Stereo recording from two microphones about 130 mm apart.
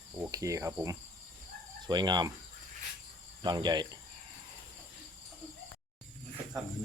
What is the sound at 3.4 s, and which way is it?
Cricket, 35° right (ahead or behind).